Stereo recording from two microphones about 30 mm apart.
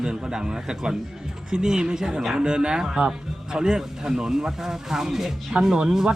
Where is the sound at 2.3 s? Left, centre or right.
Right.